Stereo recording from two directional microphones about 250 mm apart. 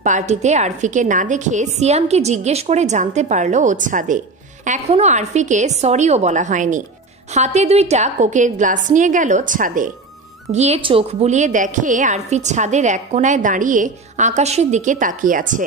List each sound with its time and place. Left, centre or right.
0.0 s a woman's voice: right